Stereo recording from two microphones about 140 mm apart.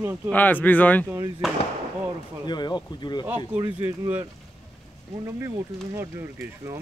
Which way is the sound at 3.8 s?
20° right (ahead or behind).